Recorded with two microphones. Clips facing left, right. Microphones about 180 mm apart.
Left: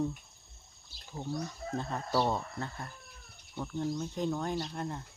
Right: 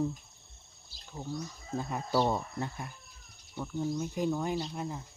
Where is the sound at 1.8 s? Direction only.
10° right (ahead or behind).